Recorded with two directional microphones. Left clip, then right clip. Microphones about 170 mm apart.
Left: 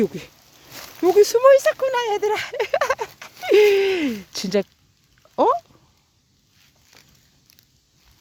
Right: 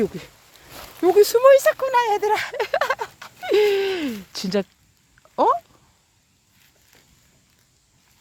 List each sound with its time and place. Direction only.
0.0 s speech: 15° left (ahead or behind)
0.7 s speech: centre (ahead or behind)